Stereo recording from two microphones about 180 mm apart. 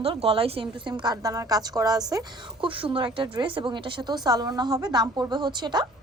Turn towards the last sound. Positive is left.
turn(degrees=-25)  # may be behind; listen again after turning